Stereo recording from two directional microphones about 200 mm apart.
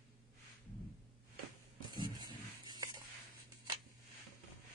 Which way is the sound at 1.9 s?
20° right (ahead or behind).